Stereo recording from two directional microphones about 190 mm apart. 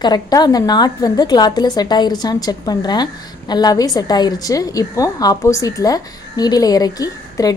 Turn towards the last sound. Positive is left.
turn(degrees=20)  # may be behind; listen again after turning